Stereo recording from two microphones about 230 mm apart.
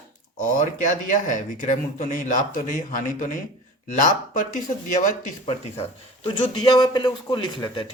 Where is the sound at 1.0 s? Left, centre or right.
Left.